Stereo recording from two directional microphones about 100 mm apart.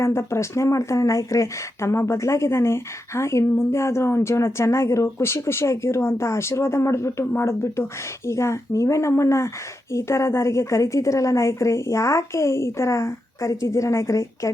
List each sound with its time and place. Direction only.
0.0 s a woman's voice: 25° left (ahead or behind)